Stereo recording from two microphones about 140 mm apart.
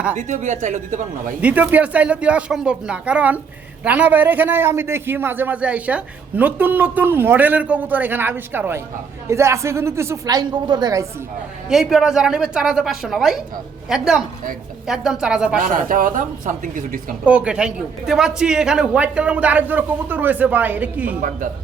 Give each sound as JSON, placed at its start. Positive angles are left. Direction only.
{"t": 0.2, "sound": "speech", "side_deg": -60}
{"t": 1.4, "sound": "a man's voice", "side_deg": -10}
{"t": 11.7, "sound": "a woman's voice", "side_deg": -5}
{"t": 15.6, "sound": "speech", "side_deg": -75}
{"t": 17.2, "sound": "a man's voice", "side_deg": -10}
{"t": 21.2, "sound": "speech", "side_deg": -70}